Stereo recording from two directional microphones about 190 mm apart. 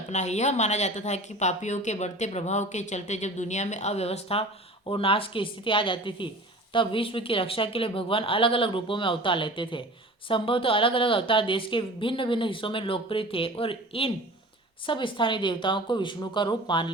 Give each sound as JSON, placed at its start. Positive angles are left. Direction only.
{"t": 0.1, "sound": "speech", "side_deg": 35}